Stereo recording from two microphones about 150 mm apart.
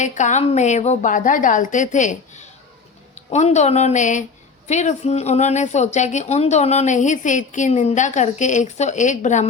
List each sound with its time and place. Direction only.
0.0 s a woman's voice: 55° left (ahead or behind)